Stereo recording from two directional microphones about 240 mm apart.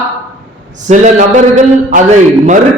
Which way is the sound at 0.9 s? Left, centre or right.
Right.